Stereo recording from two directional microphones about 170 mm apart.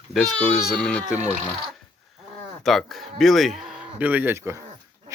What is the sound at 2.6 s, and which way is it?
Speech, centre (ahead or behind).